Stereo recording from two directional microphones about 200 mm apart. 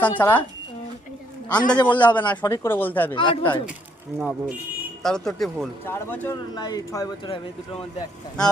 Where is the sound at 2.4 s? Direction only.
10° left (ahead or behind).